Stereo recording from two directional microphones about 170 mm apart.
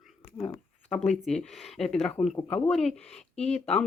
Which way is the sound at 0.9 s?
Centre (ahead or behind).